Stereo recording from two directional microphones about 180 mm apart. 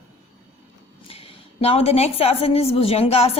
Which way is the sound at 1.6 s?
35° left (ahead or behind).